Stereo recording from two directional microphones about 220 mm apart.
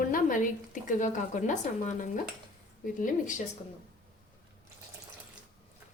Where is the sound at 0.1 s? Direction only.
35° left (ahead or behind).